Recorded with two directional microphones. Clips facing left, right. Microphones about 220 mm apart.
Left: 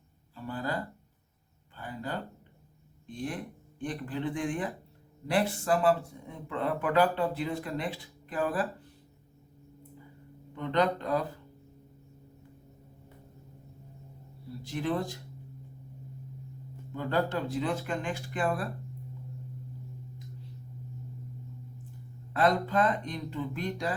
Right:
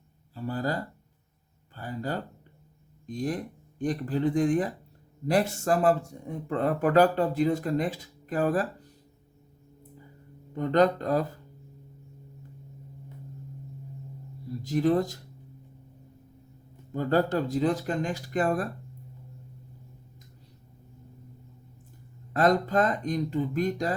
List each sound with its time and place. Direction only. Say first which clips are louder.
0.3 s speech: right 4 dB; 40° right (ahead or behind)
10.5 s speech: right 5 dB; 40° right (ahead or behind)
14.6 s speech: right 7 dB; 40° right (ahead or behind)
16.9 s speech: right 5 dB; 40° right (ahead or behind)
22.3 s speech: right 3 dB; 40° right (ahead or behind)